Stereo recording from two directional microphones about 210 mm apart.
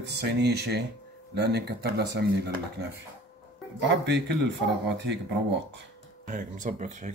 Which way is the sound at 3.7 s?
55° right (ahead or behind).